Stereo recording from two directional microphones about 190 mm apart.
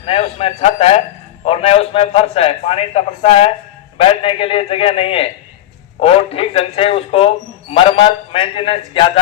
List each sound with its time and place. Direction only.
0.0 s a man's voice: 30° left (ahead or behind)